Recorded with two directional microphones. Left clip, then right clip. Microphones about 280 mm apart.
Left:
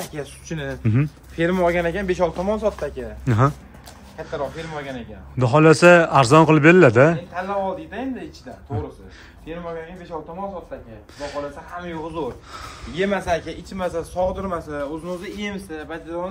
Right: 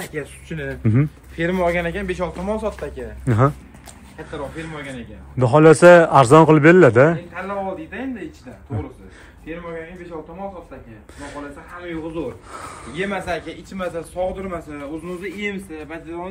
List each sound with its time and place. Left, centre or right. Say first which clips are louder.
0.0 s speech: right 2 dB; centre
1.3 s speech: left 1 dB; left
3.3 s a man's voice: right 2 dB; centre
5.4 s a man's voice: right 3 dB; centre
11.1 s a man's voice: left 5 dB; centre
12.4 s a man's voice: right 2 dB; centre
13.1 s speech: left 3 dB; left
13.9 s a man's voice: left 2 dB; centre